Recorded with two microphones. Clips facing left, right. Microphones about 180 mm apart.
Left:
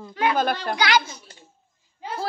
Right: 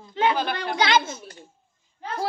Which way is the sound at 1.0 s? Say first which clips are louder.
Right 6 dB; 50° right (ahead or behind).